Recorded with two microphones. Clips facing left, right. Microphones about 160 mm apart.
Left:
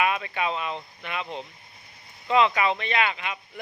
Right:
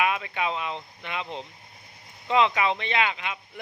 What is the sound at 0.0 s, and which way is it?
Speech, 15° right (ahead or behind).